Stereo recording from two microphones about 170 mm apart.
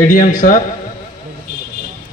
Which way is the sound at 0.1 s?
55° left (ahead or behind).